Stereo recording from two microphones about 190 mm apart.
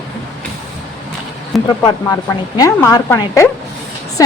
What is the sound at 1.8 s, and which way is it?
Speech, 20° left (ahead or behind).